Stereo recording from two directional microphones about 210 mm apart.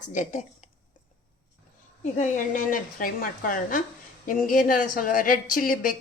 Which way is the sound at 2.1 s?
35° left (ahead or behind).